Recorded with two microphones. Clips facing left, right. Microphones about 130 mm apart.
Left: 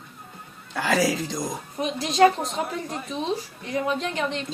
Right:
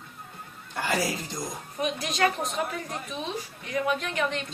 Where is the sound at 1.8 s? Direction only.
30° left (ahead or behind).